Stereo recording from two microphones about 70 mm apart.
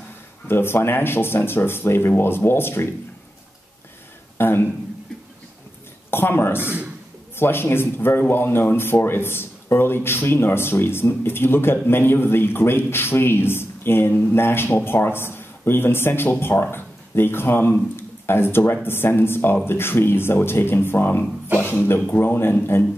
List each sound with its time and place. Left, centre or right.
0.5 s speech: left
4.4 s speech: left
6.0 s a woman's voice: left
17.9 s a sound: left
18.9 s a man's voice: left